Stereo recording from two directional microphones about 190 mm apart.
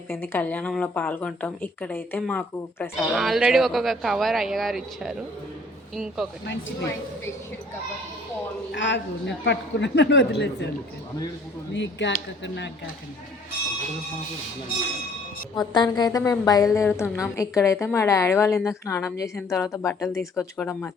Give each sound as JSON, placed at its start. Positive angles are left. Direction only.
{"t": 0.1, "sound": "speech", "side_deg": 10}
{"t": 3.2, "sound": "speech", "side_deg": 0}
{"t": 6.4, "sound": "a man's voice", "side_deg": 75}
{"t": 8.7, "sound": "a man's voice", "side_deg": 70}
{"t": 11.7, "sound": "a man's voice", "side_deg": 70}
{"t": 15.5, "sound": "a woman's voice", "side_deg": 20}